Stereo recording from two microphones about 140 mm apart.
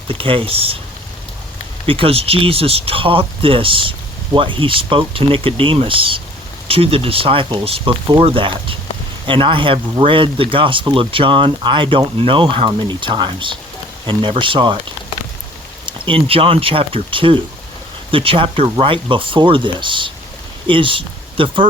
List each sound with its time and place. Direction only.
0.1 s speech: 40° right (ahead or behind)
1.9 s speech: 40° right (ahead or behind)
15.9 s speech: 40° right (ahead or behind)